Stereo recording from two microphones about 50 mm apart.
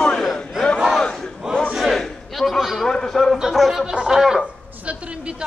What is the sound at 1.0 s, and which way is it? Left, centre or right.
Battle cry, centre.